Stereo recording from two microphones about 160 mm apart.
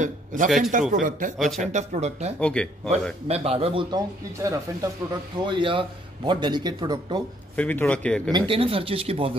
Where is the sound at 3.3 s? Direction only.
40° right (ahead or behind).